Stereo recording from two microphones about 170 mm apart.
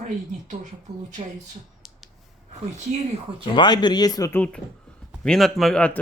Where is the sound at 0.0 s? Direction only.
50° right (ahead or behind).